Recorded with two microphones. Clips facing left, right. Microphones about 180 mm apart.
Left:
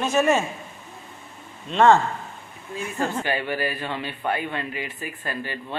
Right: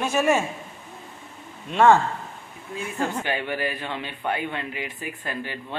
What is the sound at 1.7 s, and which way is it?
Speech, 10° right (ahead or behind).